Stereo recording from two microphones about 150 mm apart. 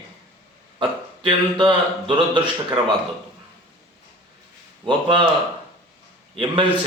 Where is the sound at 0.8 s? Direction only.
35° right (ahead or behind).